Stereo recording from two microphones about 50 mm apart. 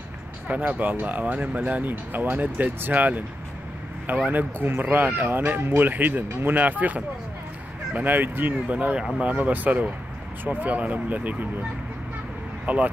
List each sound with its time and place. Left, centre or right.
0.5 s speech: right
4.3 s speech: right
8.9 s speech: right
12.6 s speech: right